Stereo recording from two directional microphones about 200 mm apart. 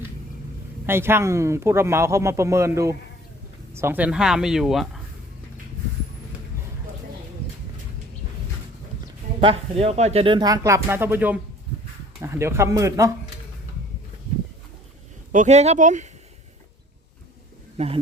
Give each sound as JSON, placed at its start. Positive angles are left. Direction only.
{"t": 0.9, "sound": "speech", "side_deg": -10}
{"t": 9.4, "sound": "speech", "side_deg": -30}
{"t": 15.3, "sound": "speech", "side_deg": -35}
{"t": 17.7, "sound": "speech", "side_deg": -30}